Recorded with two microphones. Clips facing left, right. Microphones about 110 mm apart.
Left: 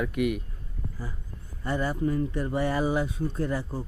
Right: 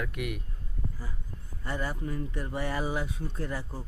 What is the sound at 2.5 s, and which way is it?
Speech, 30° left (ahead or behind).